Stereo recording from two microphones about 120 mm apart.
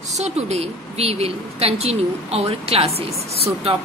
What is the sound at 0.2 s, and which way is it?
A woman's voice, 60° right (ahead or behind).